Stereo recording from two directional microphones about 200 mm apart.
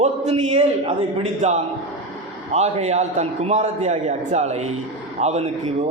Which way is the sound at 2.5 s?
30° right (ahead or behind).